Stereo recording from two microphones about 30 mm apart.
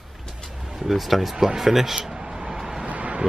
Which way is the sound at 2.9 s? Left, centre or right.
Right.